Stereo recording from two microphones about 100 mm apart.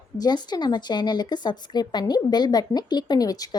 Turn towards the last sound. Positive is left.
turn(degrees=40)  # may be behind; listen again after turning